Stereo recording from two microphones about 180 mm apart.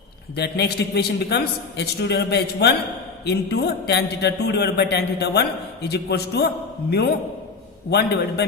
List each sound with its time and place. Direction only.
0.3 s a man's voice: 65° left (ahead or behind)
7.9 s a man's voice: 65° left (ahead or behind)